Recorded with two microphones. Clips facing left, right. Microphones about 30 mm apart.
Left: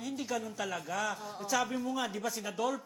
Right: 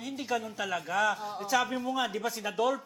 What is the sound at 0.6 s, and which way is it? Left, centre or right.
A man's voice, centre.